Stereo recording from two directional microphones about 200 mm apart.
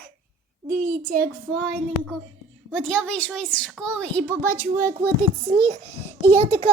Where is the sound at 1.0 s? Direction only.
45° right (ahead or behind).